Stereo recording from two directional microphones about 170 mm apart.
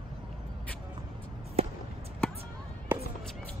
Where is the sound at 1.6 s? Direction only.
35° right (ahead or behind).